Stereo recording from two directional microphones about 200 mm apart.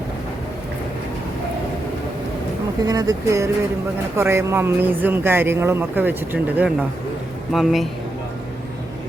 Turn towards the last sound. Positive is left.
turn(degrees=0)  # may be behind; listen again after turning